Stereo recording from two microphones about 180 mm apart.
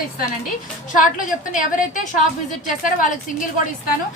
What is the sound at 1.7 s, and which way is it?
Speech, 45° left (ahead or behind).